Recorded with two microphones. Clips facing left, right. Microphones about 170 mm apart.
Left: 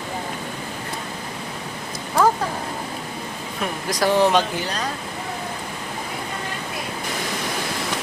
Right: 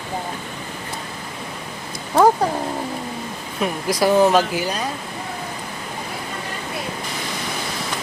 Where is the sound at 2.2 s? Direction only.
25° right (ahead or behind).